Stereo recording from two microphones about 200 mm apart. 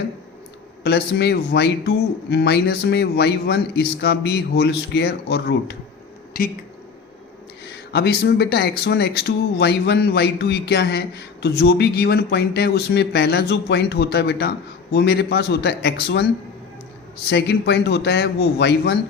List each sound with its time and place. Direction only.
0.9 s a man's voice: 55° left (ahead or behind)
7.7 s a man's voice: 55° left (ahead or behind)